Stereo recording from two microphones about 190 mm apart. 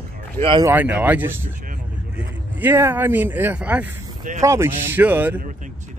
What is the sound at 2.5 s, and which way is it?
Speech, 10° right (ahead or behind).